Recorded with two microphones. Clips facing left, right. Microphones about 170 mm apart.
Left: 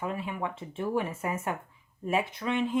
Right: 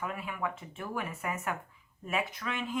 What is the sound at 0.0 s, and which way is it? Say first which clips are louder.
A woman's voice: left 3 dB; 30° left (ahead or behind).